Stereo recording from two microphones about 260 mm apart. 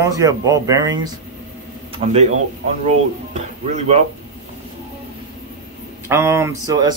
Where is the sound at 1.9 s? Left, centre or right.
Right.